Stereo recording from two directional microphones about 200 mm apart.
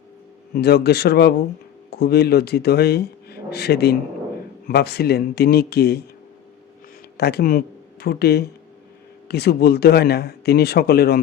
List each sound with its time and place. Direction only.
0.5 s a man's voice: 55° left (ahead or behind)
7.2 s speech: 50° left (ahead or behind)